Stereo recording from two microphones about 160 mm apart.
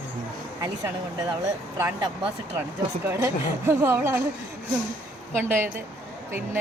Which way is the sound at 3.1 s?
15° right (ahead or behind).